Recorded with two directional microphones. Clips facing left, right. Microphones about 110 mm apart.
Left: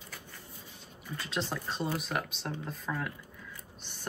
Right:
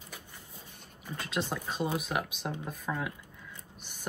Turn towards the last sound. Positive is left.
turn(degrees=-10)  # may be behind; listen again after turning